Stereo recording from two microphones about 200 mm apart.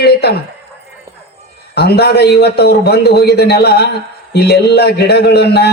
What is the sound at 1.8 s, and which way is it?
A man's voice, 55° left (ahead or behind).